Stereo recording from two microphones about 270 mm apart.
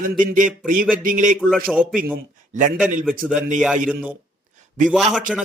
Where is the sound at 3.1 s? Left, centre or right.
Right.